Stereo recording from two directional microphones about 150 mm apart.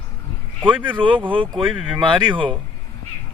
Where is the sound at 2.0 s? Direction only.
35° right (ahead or behind).